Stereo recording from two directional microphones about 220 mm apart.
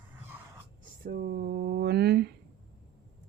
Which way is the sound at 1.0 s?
40° right (ahead or behind).